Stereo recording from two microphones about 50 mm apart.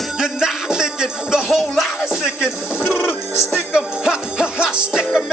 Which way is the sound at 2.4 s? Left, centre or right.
Left.